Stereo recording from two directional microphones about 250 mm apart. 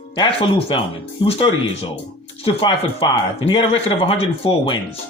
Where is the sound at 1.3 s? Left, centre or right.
Left.